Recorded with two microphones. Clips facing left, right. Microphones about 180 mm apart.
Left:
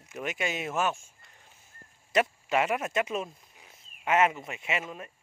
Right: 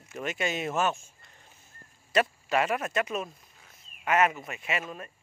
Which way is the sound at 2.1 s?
20° left (ahead or behind).